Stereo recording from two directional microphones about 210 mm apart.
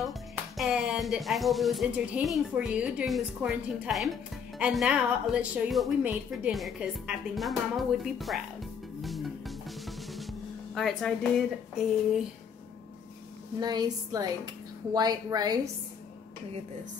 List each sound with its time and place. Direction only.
0.6 s a woman's voice: 5° right (ahead or behind)
9.0 s music: centre (ahead or behind)
13.6 s a woman's voice: 20° right (ahead or behind)